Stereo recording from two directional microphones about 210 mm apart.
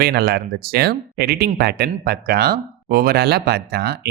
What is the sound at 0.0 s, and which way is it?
Speech, 50° right (ahead or behind).